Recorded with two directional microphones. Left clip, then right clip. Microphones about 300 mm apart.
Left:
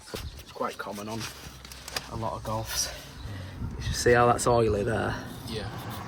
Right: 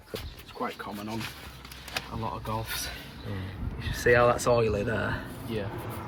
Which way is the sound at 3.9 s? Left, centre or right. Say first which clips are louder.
Left 1 dB; left.